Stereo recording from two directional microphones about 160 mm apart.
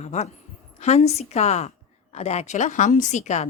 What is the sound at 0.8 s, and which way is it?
A woman's voice, 40° left (ahead or behind).